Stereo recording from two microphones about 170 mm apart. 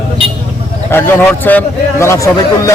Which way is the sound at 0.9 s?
10° left (ahead or behind).